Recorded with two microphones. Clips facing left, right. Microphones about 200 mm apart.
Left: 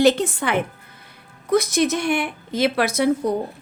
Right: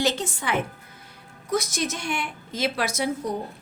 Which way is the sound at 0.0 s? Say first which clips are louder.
Left 9 dB; 60° left (ahead or behind).